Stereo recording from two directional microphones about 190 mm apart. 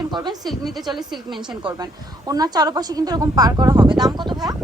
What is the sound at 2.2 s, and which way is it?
Speech, 20° right (ahead or behind).